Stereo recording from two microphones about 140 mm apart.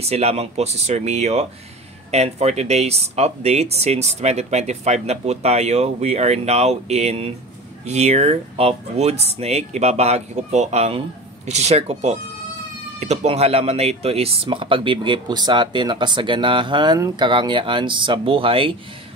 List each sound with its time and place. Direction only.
0.0 s speech: 50° right (ahead or behind)